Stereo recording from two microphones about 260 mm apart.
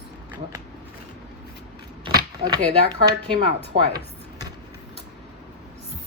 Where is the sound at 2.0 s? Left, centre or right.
Centre.